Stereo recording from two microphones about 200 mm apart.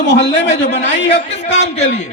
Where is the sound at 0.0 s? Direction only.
60° left (ahead or behind).